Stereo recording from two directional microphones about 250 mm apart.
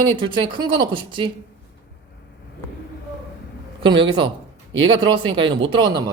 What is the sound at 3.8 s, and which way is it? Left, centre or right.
Speech, centre.